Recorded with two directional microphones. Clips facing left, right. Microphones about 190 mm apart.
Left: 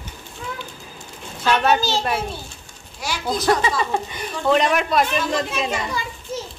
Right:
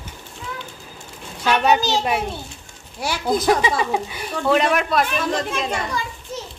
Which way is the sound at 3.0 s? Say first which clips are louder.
Right 4 dB; 55° right (ahead or behind).